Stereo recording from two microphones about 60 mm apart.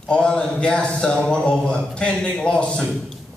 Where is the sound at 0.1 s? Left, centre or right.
Centre.